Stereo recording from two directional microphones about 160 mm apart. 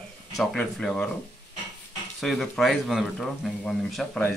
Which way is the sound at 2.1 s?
Centre (ahead or behind).